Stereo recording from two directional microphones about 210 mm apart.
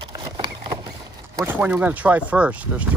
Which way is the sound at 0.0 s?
25° right (ahead or behind).